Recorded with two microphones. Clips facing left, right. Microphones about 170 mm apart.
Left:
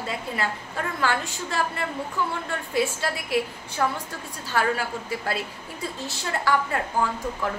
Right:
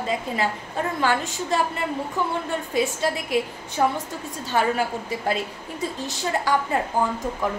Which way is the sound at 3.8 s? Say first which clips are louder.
Right 4 dB; 25° right (ahead or behind).